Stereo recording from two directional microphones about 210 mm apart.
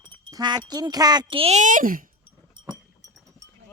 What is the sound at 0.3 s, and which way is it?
Speech, 20° right (ahead or behind).